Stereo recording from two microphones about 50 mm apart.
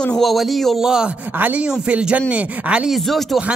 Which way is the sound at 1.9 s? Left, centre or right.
Right.